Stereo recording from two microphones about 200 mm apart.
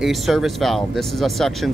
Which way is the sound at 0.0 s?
Centre (ahead or behind).